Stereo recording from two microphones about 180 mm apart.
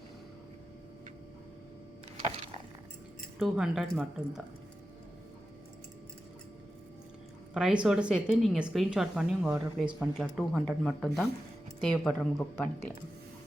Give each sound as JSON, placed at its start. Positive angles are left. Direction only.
{"t": 3.3, "sound": "a woman's voice", "side_deg": -5}
{"t": 7.5, "sound": "a woman's voice", "side_deg": -5}